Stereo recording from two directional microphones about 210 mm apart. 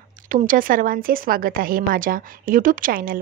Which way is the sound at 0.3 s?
40° right (ahead or behind).